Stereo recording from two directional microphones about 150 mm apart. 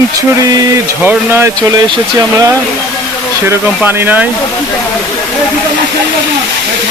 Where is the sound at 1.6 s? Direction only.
25° right (ahead or behind).